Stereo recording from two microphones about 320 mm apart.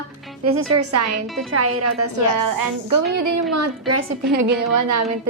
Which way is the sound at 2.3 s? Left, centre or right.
Right.